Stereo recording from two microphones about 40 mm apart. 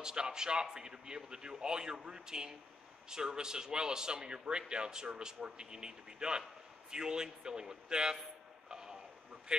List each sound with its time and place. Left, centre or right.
0.0 s a man's voice: centre
8.6 s a sound: centre
9.5 s a man's voice: centre